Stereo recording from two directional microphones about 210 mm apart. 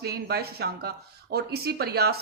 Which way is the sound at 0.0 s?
50° right (ahead or behind).